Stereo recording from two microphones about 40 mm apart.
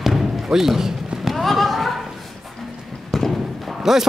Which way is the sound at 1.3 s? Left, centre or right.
Centre.